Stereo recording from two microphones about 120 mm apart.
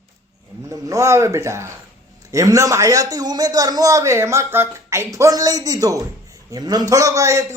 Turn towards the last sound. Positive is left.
turn(degrees=-25)  # may be behind; listen again after turning